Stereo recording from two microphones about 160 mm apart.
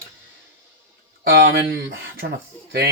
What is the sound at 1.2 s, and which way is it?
Speech, 90° right.